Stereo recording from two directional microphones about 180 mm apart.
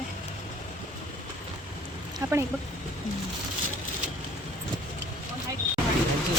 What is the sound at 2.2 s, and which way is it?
Speech, 20° right (ahead or behind).